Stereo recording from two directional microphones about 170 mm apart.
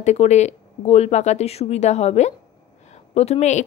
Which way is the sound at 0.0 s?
40° left (ahead or behind).